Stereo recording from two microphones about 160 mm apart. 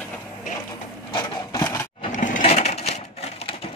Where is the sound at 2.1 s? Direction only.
50° left (ahead or behind).